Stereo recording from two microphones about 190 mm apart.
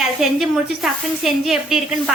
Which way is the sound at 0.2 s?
Centre (ahead or behind).